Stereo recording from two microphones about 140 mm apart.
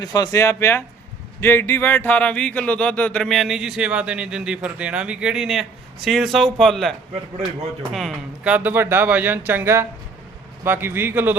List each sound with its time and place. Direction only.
0.0 s speech: 25° left (ahead or behind); by 8.1 s centre (ahead or behind)
8.4 s speech: 10° right (ahead or behind)